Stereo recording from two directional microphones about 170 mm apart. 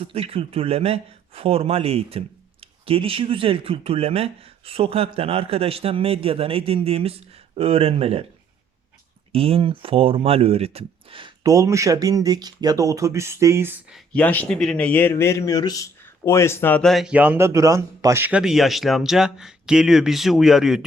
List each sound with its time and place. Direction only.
0.0 s speech: 35° right (ahead or behind)
9.3 s speech: 35° right (ahead or behind)
11.4 s speech: 20° right (ahead or behind)
13.9 s speech: 5° left (ahead or behind)